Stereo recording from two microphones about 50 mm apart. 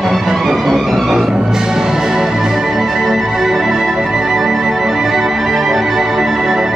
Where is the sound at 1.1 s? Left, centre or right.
Centre.